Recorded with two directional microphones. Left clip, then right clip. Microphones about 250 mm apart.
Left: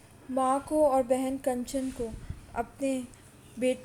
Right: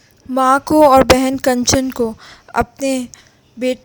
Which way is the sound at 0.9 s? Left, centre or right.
Right.